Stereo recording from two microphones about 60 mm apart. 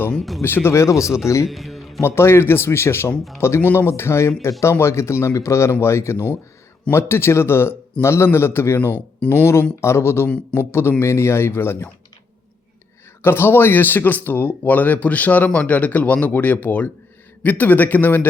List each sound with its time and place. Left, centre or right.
0.1 s speech: centre
0.4 s speech: left
1.5 s music: centre
2.0 s speech: left
13.2 s speech: left